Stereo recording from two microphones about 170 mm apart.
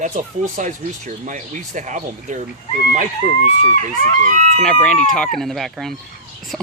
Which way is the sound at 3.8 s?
45° right (ahead or behind).